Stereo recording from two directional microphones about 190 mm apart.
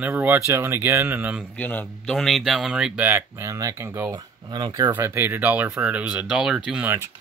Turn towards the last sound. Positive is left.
turn(degrees=-10)  # may be behind; listen again after turning